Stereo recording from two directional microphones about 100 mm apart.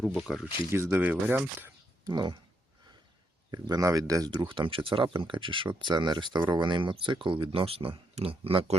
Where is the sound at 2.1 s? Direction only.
50° right (ahead or behind).